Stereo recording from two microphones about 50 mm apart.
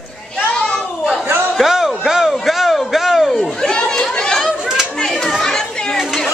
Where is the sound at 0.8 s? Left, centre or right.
Centre.